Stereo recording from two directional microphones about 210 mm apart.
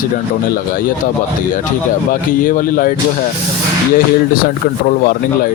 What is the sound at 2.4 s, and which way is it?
Speech, 40° left (ahead or behind).